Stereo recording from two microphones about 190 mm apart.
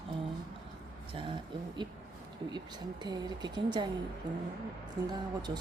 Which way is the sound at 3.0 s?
25° right (ahead or behind).